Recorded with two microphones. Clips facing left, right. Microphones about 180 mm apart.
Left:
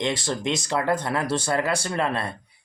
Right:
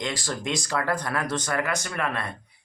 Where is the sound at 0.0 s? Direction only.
25° left (ahead or behind).